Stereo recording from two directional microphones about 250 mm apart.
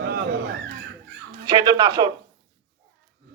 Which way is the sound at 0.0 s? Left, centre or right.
Right.